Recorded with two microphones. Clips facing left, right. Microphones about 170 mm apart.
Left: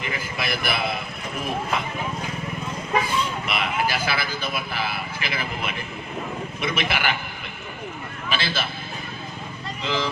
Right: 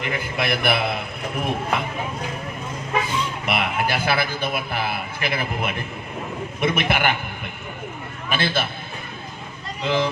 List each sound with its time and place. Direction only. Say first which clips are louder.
0.0 s speech: right 4 dB; 60° right (ahead or behind)
3.4 s a man's voice: right 2 dB; 55° right (ahead or behind)
8.3 s a man's voice: right 4 dB; 55° right (ahead or behind)
9.8 s speech: right 5 dB; 55° right (ahead or behind)